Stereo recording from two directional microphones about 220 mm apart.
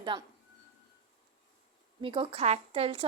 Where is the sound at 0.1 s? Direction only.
20° right (ahead or behind).